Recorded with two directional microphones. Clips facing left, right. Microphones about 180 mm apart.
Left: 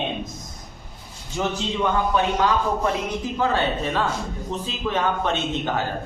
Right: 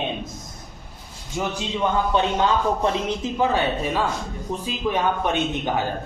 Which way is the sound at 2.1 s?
25° right (ahead or behind).